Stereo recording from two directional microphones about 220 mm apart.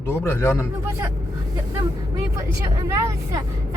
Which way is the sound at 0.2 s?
10° left (ahead or behind).